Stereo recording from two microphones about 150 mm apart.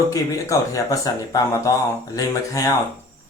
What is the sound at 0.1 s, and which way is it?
Speech, 20° left (ahead or behind).